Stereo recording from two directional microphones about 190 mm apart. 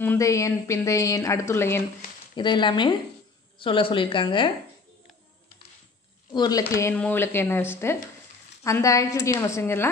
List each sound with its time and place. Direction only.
0.0 s a woman's voice: 15° left (ahead or behind)
2.3 s a woman's voice: 25° left (ahead or behind)
6.3 s a woman's voice: 20° left (ahead or behind)